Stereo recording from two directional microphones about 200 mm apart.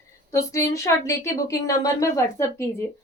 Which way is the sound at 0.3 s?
15° left (ahead or behind).